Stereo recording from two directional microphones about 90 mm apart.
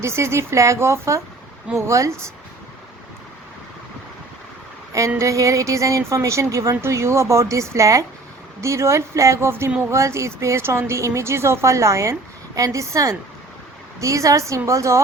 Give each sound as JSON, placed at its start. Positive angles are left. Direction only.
{"t": 0.0, "sound": "speech", "side_deg": -30}
{"t": 4.9, "sound": "speech", "side_deg": -35}